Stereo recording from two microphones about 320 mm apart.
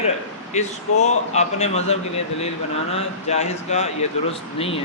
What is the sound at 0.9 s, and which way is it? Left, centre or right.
Speech, left.